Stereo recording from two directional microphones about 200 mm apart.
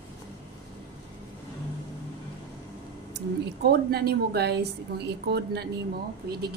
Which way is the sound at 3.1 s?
55° right (ahead or behind).